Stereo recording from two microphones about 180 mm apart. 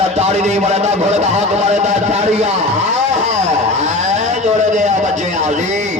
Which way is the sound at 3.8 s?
40° right (ahead or behind).